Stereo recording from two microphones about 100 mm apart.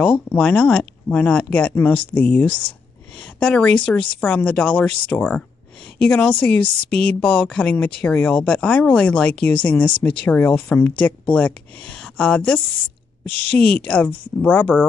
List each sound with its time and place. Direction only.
0.0 s speech: 10° left (ahead or behind)